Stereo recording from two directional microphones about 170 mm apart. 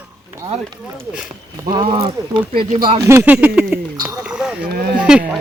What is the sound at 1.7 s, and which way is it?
Speech, 35° right (ahead or behind).